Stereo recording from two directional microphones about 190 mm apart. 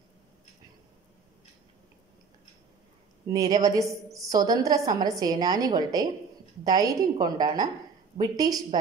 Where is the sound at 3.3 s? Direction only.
20° right (ahead or behind).